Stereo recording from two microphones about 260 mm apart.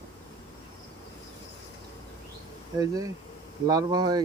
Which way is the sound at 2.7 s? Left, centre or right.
Centre.